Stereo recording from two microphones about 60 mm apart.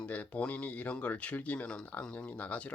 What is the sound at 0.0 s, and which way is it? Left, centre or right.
Speech, left.